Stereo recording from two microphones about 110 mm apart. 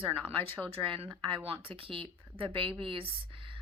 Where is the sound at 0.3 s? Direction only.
60° right (ahead or behind).